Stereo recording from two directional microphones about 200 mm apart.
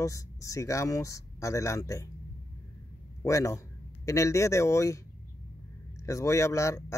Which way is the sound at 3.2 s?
15° left (ahead or behind).